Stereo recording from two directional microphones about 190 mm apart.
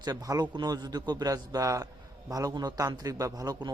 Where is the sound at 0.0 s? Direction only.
20° right (ahead or behind).